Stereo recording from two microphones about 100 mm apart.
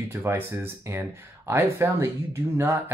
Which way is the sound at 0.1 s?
25° right (ahead or behind).